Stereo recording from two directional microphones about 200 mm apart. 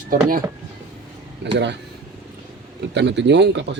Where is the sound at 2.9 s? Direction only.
60° right (ahead or behind).